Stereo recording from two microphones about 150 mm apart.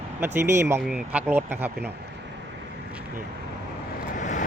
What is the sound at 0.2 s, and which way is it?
Speech, 15° right (ahead or behind).